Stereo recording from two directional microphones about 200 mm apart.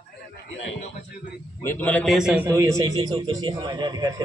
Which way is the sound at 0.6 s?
35° left (ahead or behind).